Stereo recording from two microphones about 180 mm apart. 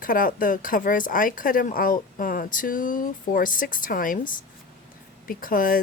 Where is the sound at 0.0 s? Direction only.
50° left (ahead or behind).